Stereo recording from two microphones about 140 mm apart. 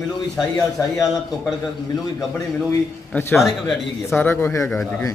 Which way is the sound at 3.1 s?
15° left (ahead or behind).